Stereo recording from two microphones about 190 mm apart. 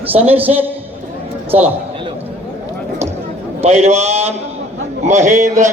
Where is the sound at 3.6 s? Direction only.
35° right (ahead or behind).